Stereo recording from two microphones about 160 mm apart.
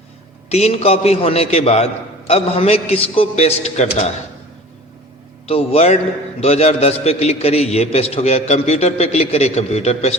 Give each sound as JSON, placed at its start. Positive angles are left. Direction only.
{"t": 0.5, "sound": "a man's voice", "side_deg": 40}
{"t": 5.5, "sound": "a man's voice", "side_deg": 40}